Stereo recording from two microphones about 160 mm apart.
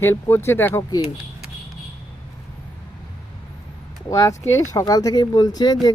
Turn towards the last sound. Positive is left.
turn(degrees=25)  # may be behind; listen again after turning